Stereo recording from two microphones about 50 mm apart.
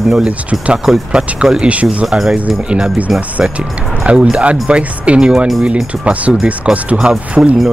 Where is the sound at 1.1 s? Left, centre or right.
Centre.